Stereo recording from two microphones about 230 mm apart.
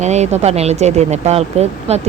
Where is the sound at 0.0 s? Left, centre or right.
Right.